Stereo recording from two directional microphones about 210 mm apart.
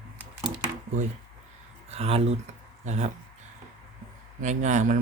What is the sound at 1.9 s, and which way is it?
Speech, 30° right (ahead or behind).